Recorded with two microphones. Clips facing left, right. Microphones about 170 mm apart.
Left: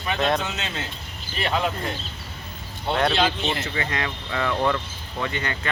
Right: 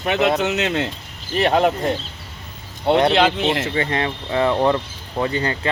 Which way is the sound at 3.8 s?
30° right (ahead or behind).